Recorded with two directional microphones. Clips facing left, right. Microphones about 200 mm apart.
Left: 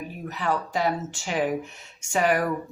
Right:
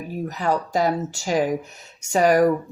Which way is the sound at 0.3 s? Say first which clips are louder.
Right 3 dB; 40° right (ahead or behind).